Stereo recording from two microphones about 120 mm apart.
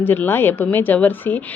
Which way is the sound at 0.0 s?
15° left (ahead or behind).